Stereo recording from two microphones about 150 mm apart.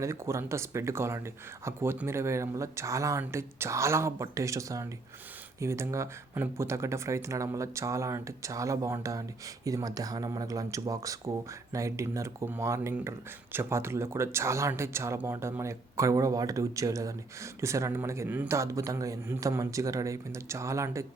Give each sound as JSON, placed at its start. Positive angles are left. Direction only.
{"t": 0.0, "sound": "speech", "side_deg": -20}